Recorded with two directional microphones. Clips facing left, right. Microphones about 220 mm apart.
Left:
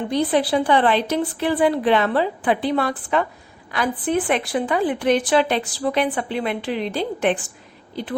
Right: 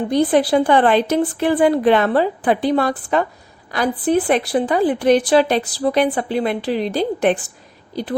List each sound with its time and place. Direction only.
0.1 s a woman's voice: 45° right (ahead or behind)